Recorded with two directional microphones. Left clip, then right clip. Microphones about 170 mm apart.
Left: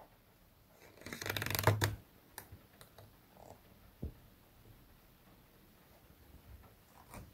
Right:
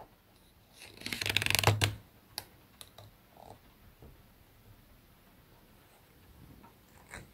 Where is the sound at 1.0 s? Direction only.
40° right (ahead or behind).